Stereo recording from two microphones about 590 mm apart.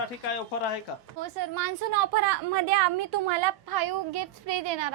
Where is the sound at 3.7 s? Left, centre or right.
Right.